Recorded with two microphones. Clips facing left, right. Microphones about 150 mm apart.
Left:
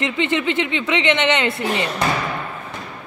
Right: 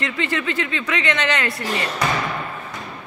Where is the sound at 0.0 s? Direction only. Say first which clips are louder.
Left 4 dB; 20° left (ahead or behind).